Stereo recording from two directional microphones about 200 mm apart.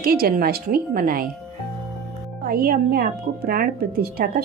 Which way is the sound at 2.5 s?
45° right (ahead or behind).